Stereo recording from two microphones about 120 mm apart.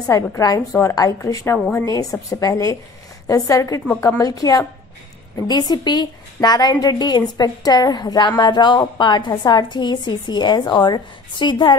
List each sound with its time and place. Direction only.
0.0 s a woman's voice: 25° left (ahead or behind)